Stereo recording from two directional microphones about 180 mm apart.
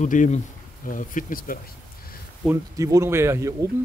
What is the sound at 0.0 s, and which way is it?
Speech, 45° left (ahead or behind).